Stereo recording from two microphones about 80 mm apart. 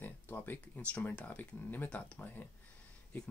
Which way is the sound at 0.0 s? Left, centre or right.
Left.